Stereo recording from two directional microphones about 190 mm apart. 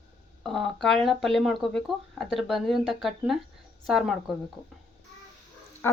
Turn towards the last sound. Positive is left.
turn(degrees=10)  # may be behind; listen again after turning